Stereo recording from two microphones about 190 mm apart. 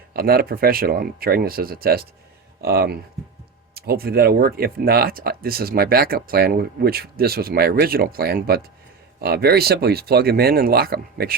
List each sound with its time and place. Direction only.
0.1 s speech: 50° right (ahead or behind)